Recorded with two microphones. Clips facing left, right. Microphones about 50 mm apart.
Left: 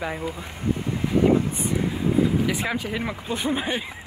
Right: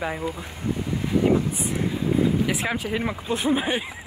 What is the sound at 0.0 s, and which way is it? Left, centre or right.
Speech, centre.